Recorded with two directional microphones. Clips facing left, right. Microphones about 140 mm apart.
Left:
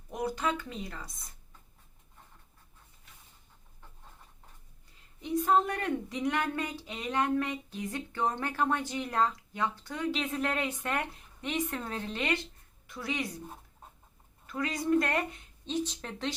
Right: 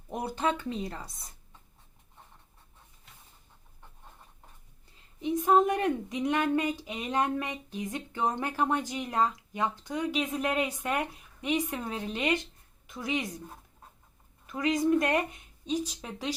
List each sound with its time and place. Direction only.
0.1 s a woman's voice: 30° right (ahead or behind)
5.2 s a woman's voice: 15° right (ahead or behind)
14.4 s a woman's voice: 20° right (ahead or behind)